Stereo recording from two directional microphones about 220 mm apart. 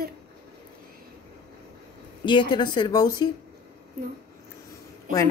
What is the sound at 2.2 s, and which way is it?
Speech, 20° left (ahead or behind).